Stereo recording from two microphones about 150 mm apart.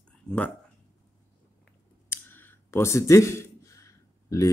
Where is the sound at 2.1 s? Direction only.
15° left (ahead or behind).